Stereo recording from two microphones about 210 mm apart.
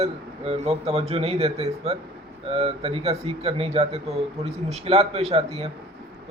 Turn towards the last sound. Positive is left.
turn(degrees=-30)  # may be behind; listen again after turning